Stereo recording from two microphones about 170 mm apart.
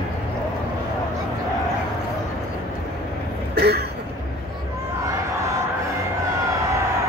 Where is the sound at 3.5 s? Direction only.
70° right (ahead or behind).